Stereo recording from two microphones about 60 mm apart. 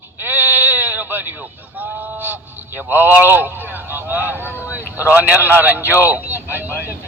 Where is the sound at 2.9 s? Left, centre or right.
Right.